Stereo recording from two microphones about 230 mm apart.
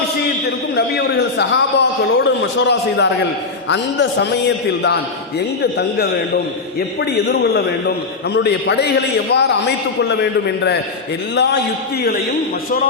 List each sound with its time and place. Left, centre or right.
0.8 s a man's voice: left
6.7 s a man's voice: left